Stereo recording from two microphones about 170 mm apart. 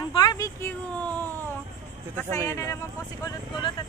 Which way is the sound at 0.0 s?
25° left (ahead or behind).